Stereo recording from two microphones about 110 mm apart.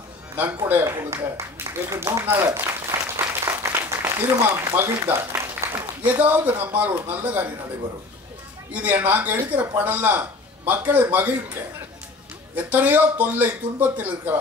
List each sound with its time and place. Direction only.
0.4 s a sound: 20° right (ahead or behind)
4.7 s a man's voice: 25° right (ahead or behind)
8.8 s a man's voice: 15° right (ahead or behind)
12.6 s a man's voice: 15° right (ahead or behind)